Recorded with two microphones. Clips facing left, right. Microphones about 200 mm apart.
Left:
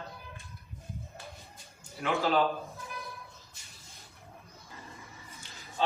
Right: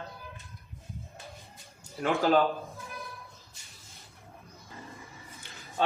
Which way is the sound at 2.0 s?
45° right (ahead or behind).